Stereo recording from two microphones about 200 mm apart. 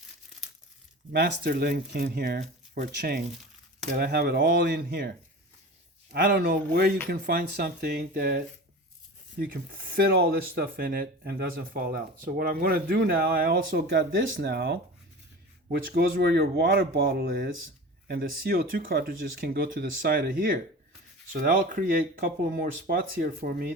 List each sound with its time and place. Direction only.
1.1 s speech: 50° right (ahead or behind)
2.4 s speech: 40° right (ahead or behind)
2.9 s speech: 55° right (ahead or behind)
6.1 s speech: 50° right (ahead or behind)
14.3 s speech: 70° right (ahead or behind)
14.5 s speech: 50° right (ahead or behind)
15.9 s speech: 50° right (ahead or behind)